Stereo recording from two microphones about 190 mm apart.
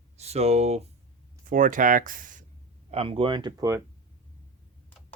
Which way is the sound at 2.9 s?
30° right (ahead or behind).